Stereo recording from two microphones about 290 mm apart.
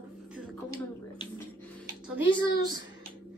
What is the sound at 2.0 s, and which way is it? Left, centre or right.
Speech, centre.